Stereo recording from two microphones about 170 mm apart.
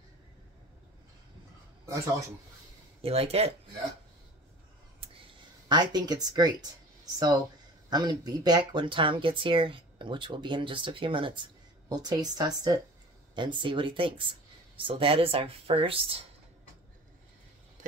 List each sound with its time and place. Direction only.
3.0 s speech: 35° right (ahead or behind)
5.7 s speech: 25° right (ahead or behind)